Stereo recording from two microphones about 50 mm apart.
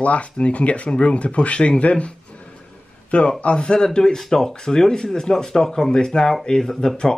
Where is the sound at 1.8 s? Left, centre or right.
Left.